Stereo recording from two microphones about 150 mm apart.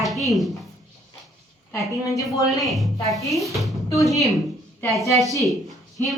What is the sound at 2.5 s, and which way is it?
A woman's voice, centre (ahead or behind).